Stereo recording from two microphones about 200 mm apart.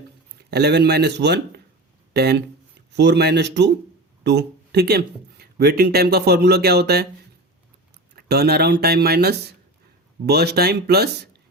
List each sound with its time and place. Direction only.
0.5 s a man's voice: 55° right (ahead or behind)
8.1 s speech: 55° right (ahead or behind)